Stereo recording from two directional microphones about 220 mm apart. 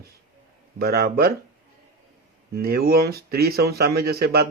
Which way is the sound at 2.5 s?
45° right (ahead or behind).